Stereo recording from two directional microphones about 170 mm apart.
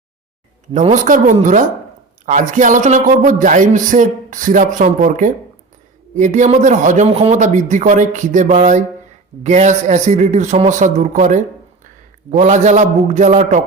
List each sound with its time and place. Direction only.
0.7 s speech: 45° right (ahead or behind)